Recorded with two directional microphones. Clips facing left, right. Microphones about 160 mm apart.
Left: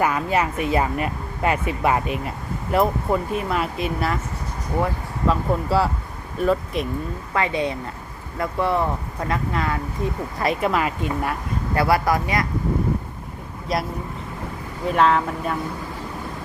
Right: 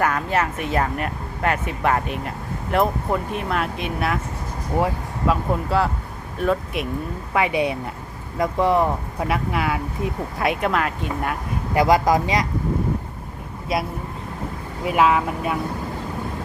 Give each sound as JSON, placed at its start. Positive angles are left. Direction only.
{"t": 0.0, "sound": "speech", "side_deg": 10}
{"t": 5.3, "sound": "speech", "side_deg": 5}
{"t": 7.3, "sound": "speech", "side_deg": -10}
{"t": 11.7, "sound": "speech", "side_deg": -15}
{"t": 13.7, "sound": "speech", "side_deg": 0}